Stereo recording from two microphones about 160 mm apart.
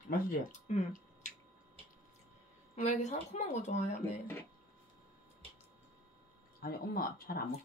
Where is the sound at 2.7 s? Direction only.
50° left (ahead or behind).